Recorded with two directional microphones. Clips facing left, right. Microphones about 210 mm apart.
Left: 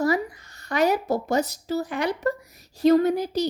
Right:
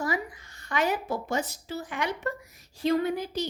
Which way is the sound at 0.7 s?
40° left (ahead or behind).